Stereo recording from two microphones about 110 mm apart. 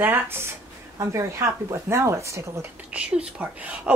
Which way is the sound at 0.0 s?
20° right (ahead or behind).